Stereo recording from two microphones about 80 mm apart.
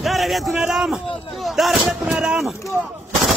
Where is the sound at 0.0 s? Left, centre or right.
Centre.